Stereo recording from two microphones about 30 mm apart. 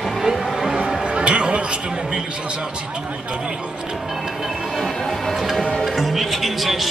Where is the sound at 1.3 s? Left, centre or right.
Right.